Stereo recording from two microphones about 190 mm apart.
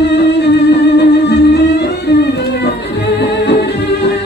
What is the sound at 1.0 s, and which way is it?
Music, 60° left (ahead or behind).